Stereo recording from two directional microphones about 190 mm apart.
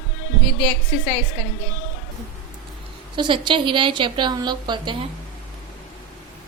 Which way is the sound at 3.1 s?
25° right (ahead or behind).